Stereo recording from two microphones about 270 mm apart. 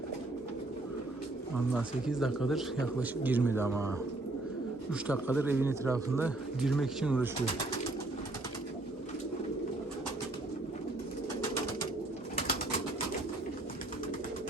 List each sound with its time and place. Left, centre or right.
1.7 s a man's voice: centre
5.0 s speech: centre